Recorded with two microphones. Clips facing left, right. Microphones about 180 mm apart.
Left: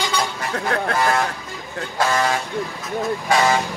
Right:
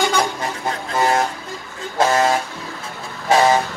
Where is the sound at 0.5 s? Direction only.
65° left (ahead or behind).